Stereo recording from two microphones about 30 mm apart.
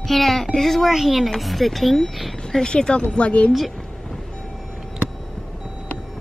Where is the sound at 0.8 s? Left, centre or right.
Centre.